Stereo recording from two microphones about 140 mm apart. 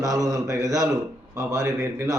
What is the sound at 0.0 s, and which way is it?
Speech, 25° right (ahead or behind).